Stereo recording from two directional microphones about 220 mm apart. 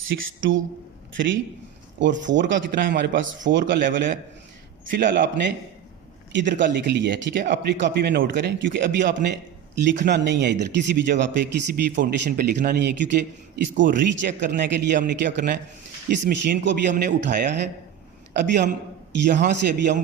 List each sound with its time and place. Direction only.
0.1 s a man's voice: 50° right (ahead or behind)
6.6 s speech: 50° right (ahead or behind)
18.3 s speech: 50° right (ahead or behind)